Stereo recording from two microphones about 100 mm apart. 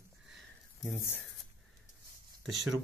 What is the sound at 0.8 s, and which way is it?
Speech, 20° left (ahead or behind).